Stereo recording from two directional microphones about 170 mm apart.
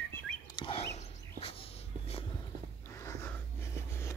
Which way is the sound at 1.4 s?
35° left (ahead or behind).